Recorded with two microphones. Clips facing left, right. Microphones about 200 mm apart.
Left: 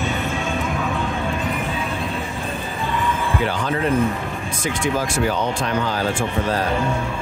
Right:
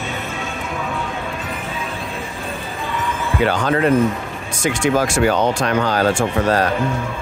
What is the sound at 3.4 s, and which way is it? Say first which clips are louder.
Speech: right 8 dB; 80° right.